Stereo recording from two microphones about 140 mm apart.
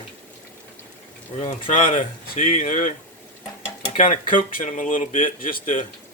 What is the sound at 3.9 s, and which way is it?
Speech, 70° left (ahead or behind).